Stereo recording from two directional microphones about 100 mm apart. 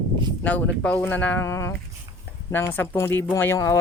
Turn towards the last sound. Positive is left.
turn(degrees=30)  # may be behind; listen again after turning